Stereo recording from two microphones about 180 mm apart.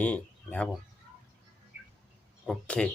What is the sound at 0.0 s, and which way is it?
Speech, 5° left (ahead or behind).